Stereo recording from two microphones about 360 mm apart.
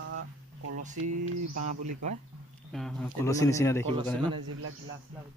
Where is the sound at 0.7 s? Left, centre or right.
Right.